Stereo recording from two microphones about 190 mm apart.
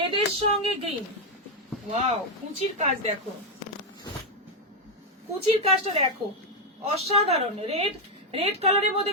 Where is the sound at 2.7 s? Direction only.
35° right (ahead or behind).